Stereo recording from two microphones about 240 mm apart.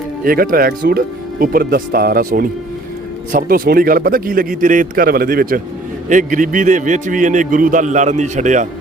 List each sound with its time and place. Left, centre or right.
0.3 s a man's voice: right